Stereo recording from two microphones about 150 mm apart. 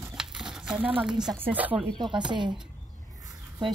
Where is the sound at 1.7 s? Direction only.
30° right (ahead or behind).